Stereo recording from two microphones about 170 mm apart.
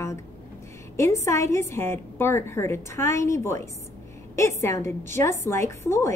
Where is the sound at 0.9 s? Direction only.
15° left (ahead or behind).